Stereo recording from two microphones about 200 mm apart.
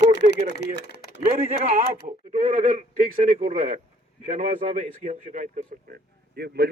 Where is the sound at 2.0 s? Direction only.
40° right (ahead or behind).